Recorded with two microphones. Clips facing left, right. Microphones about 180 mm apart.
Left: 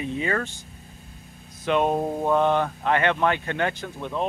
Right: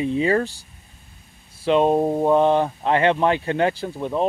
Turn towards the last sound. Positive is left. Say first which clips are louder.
# right 5 dB
turn(degrees=-35)  # may be behind; listen again after turning